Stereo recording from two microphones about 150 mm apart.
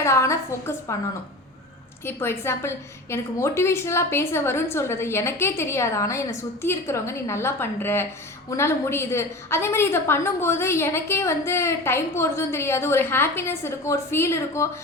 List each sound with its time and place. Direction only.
0.0 s a woman's voice: 20° left (ahead or behind)
2.0 s a woman's voice: 15° left (ahead or behind)